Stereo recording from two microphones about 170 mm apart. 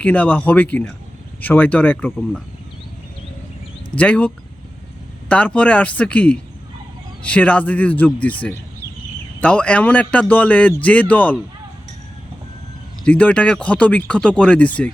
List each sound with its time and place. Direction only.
0.0 s speech: 10° left (ahead or behind)
3.9 s speech: 10° left (ahead or behind)
5.3 s speech: 5° left (ahead or behind)
13.1 s speech: 10° left (ahead or behind)